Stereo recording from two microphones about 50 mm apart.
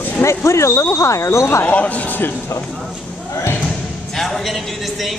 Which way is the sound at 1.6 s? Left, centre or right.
Left.